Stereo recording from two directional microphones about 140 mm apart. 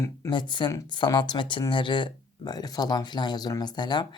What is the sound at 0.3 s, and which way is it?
Speech, 35° left (ahead or behind).